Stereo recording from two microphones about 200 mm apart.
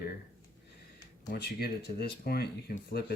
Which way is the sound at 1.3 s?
50° left (ahead or behind).